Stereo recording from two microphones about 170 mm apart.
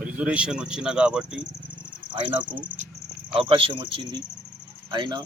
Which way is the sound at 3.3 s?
30° right (ahead or behind).